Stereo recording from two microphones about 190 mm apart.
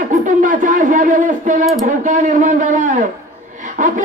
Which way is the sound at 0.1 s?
45° right (ahead or behind).